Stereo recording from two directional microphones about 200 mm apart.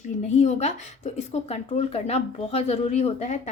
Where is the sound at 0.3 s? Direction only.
35° left (ahead or behind).